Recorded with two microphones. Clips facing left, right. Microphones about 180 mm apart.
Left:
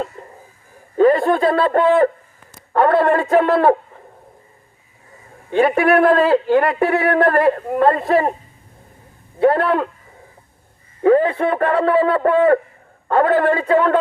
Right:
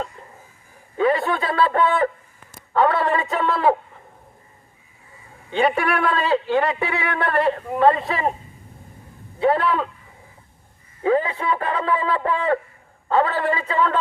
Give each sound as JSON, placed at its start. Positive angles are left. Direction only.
{"t": 0.2, "sound": "a sound", "side_deg": 45}
{"t": 0.9, "sound": "a man's voice", "side_deg": 45}
{"t": 5.5, "sound": "speech", "side_deg": 50}
{"t": 9.4, "sound": "speech", "side_deg": 55}
{"t": 11.0, "sound": "speech", "side_deg": 55}